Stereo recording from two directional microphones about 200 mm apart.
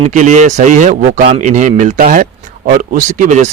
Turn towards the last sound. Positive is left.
turn(degrees=-35)  # may be behind; listen again after turning